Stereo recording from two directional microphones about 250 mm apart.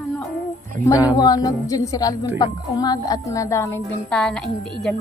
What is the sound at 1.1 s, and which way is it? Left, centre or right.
A woman's voice, centre.